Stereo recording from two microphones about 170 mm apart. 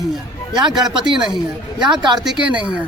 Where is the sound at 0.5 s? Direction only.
25° right (ahead or behind).